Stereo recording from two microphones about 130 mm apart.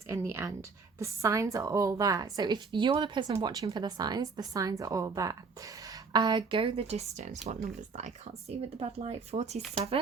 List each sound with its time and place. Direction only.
0.1 s a woman's voice: 20° right (ahead or behind); by 10.0 s 50° right (ahead or behind)